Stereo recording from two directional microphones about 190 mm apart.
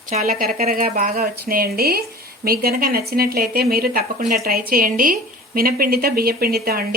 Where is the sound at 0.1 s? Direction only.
45° right (ahead or behind).